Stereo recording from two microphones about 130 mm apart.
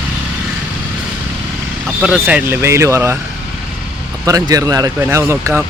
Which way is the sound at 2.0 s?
10° right (ahead or behind).